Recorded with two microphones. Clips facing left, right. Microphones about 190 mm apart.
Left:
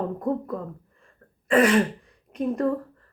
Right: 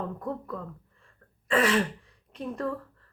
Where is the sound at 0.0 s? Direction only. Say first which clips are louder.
Left 7 dB; 35° left (ahead or behind).